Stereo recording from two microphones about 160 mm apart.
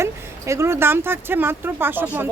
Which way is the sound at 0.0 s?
20° right (ahead or behind).